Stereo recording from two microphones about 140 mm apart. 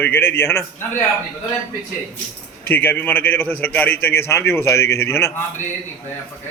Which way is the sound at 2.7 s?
15° left (ahead or behind).